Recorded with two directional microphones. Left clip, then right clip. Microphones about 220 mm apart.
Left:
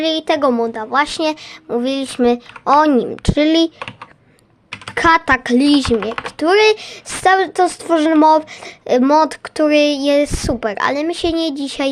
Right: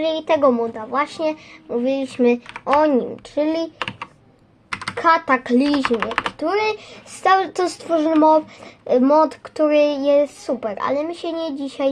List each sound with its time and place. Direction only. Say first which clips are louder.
0.0 s a woman's voice: left 1 dB; 25° left (ahead or behind)
2.7 s speech: left 4 dB; 35° left (ahead or behind)
4.9 s speech: left 4 dB; 40° left (ahead or behind)
6.3 s speech: left 8 dB; 40° left (ahead or behind); by 7.7 s 20° left (ahead or behind)
7.9 s speech: left 3 dB; 35° left (ahead or behind)